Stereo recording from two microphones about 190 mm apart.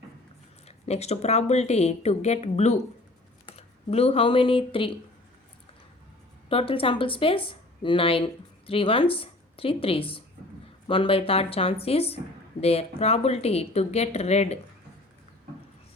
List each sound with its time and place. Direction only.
0.7 s speech: 35° left (ahead or behind)
6.5 s speech: 30° left (ahead or behind)